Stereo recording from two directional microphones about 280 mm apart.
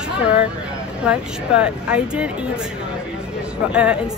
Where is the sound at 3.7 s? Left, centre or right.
Centre.